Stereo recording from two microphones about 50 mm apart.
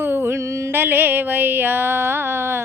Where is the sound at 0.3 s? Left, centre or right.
Right.